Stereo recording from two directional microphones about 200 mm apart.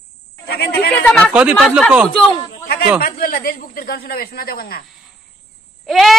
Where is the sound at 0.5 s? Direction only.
50° left (ahead or behind).